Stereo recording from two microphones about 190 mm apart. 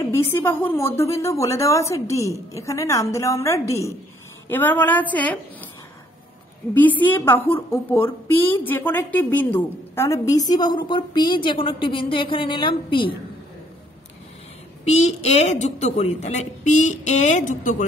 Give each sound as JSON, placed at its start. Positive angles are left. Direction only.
{"t": 0.1, "sound": "a woman's voice", "side_deg": 15}
{"t": 6.7, "sound": "a woman's voice", "side_deg": 10}
{"t": 14.9, "sound": "a woman's voice", "side_deg": 35}